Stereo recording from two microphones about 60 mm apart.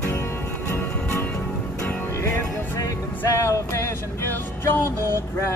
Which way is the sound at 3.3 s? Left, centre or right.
Left.